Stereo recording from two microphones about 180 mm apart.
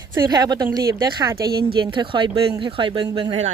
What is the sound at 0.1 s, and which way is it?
Speech, 15° right (ahead or behind).